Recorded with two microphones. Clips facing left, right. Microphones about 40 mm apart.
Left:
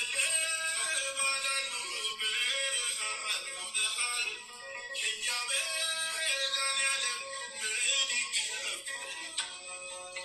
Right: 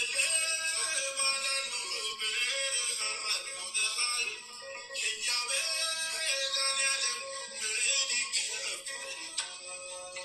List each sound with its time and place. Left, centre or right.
0.0 s music: left